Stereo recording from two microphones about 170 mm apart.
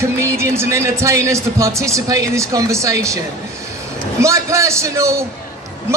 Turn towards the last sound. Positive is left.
turn(degrees=-15)  # may be behind; listen again after turning